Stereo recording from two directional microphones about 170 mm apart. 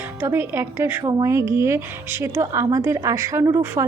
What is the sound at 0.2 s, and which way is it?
A woman's voice, 15° right (ahead or behind).